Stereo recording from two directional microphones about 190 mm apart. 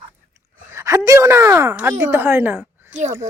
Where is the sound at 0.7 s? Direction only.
15° right (ahead or behind).